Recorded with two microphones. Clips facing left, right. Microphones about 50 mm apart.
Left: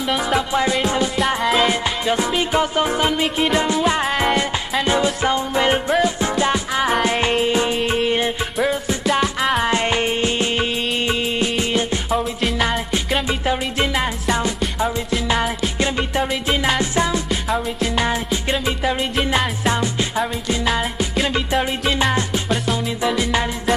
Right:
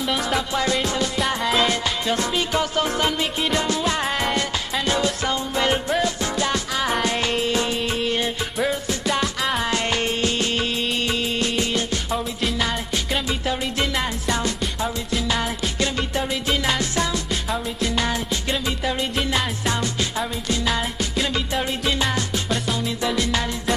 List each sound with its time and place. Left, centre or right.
0.0 s music: centre
9.6 s music: left
12.4 s music: centre
13.3 s music: centre
15.2 s music: left
17.3 s music: centre
17.9 s music: centre